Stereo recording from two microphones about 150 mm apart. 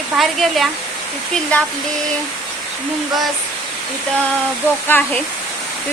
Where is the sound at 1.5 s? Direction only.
10° left (ahead or behind).